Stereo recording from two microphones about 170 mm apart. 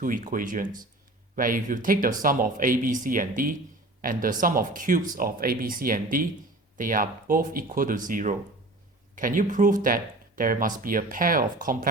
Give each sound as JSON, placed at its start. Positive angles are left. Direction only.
{"t": 0.0, "sound": "speech", "side_deg": -55}